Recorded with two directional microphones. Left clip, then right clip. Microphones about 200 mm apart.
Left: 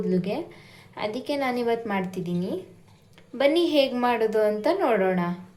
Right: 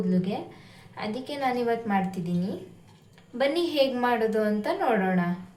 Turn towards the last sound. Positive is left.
turn(degrees=25)  # may be behind; listen again after turning